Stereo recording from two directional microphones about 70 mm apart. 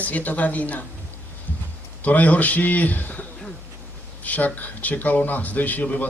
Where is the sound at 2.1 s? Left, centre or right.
Left.